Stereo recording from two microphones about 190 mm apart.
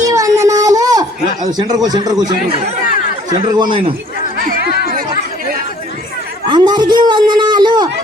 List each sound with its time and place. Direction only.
0.0 s a sound: 15° right (ahead or behind)
1.5 s speech: 20° right (ahead or behind)
3.2 s speech: 20° right (ahead or behind)
4.4 s chatter: 55° right (ahead or behind)
6.5 s a man's voice: 20° right (ahead or behind)